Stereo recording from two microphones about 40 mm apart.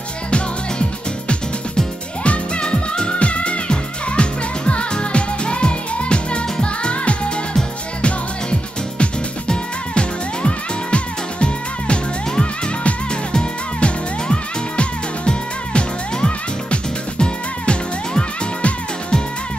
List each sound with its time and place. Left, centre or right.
2.2 s music: left